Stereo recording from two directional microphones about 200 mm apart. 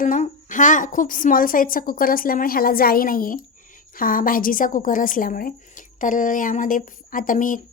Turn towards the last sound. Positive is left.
turn(degrees=40)  # may be behind; listen again after turning